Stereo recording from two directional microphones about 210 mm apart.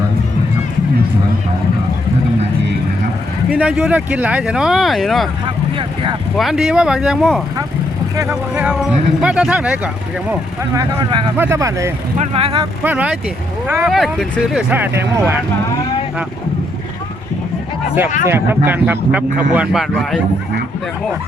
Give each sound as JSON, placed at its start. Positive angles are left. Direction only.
{"t": 3.5, "sound": "speech", "side_deg": -5}
{"t": 5.5, "sound": "vehicle", "side_deg": -25}
{"t": 6.3, "sound": "speech", "side_deg": 0}
{"t": 8.1, "sound": "speech", "side_deg": -15}
{"t": 12.2, "sound": "speech", "side_deg": -25}
{"t": 12.8, "sound": "speech", "side_deg": -5}
{"t": 18.3, "sound": "speech", "side_deg": -10}